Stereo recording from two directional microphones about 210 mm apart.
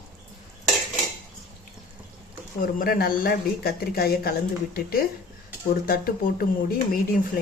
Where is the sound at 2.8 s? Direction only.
45° left (ahead or behind).